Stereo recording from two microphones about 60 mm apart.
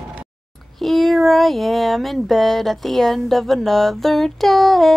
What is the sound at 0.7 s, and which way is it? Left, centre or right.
Speech, centre.